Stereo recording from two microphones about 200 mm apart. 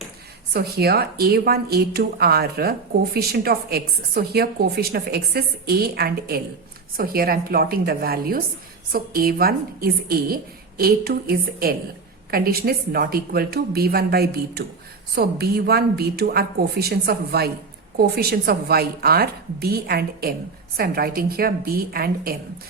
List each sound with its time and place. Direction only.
0.5 s a woman's voice: 50° right (ahead or behind)